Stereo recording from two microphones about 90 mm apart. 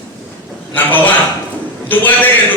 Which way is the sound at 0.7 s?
20° left (ahead or behind).